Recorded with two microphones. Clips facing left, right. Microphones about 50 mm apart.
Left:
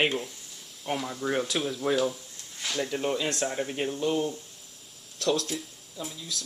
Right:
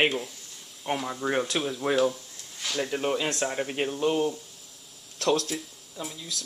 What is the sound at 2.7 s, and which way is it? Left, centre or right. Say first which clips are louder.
Speech: right 1 dB; centre.